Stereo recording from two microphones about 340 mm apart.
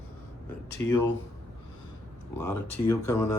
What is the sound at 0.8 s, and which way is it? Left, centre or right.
Speech, centre.